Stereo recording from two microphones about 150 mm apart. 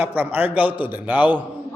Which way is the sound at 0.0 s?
10° right (ahead or behind).